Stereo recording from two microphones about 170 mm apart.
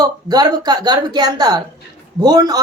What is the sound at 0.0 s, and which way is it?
Speech, 25° right (ahead or behind).